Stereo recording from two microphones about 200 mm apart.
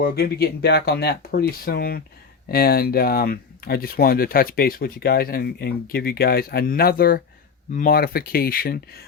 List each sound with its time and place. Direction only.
0.0 s speech: 50° left (ahead or behind)